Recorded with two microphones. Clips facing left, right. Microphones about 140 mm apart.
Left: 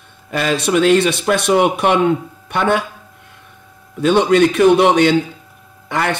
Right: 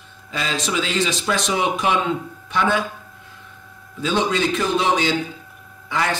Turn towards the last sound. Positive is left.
turn(degrees=65)  # may be behind; listen again after turning